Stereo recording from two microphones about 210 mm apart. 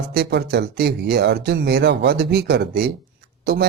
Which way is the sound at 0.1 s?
50° right (ahead or behind).